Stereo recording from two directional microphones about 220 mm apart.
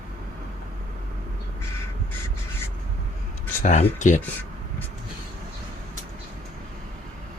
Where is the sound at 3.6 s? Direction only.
35° left (ahead or behind).